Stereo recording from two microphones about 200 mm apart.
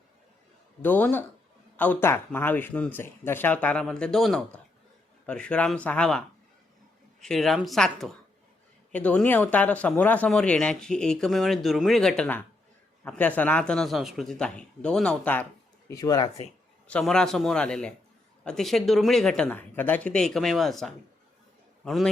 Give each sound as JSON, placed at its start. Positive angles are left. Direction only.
{"t": 0.8, "sound": "speech", "side_deg": 10}
{"t": 16.9, "sound": "speech", "side_deg": 5}